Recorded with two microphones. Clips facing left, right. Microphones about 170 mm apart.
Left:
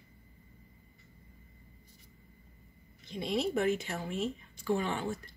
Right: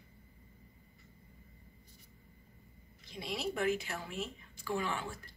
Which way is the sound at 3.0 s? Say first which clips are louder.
Left 6 dB; 30° left (ahead or behind).